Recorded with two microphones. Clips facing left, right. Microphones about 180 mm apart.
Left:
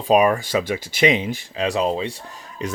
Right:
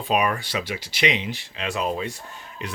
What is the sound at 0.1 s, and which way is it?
Speech, 40° left (ahead or behind).